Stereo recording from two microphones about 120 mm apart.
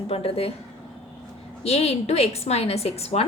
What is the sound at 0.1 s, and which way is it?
Speech, 55° left (ahead or behind).